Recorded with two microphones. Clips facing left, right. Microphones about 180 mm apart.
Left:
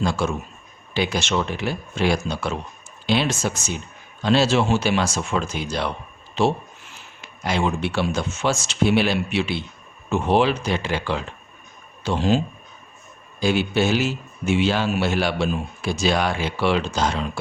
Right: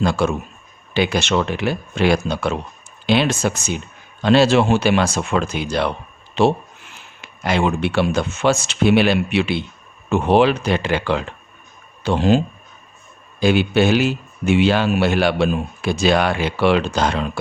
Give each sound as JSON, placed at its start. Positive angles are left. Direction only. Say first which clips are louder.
{"t": 0.0, "sound": "speech", "louder": "right 4 dB", "side_deg": -65}
{"t": 13.4, "sound": "speech", "louder": "right 5 dB", "side_deg": -65}